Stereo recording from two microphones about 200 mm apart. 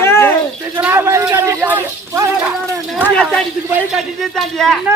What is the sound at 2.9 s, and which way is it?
Speech, 5° left (ahead or behind).